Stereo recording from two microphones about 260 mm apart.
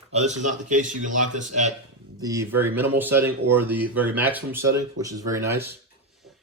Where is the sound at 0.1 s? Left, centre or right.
Right.